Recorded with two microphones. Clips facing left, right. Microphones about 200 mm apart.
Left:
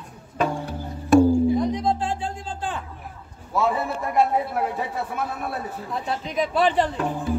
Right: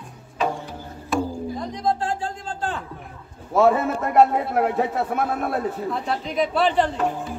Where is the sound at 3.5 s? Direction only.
55° right (ahead or behind).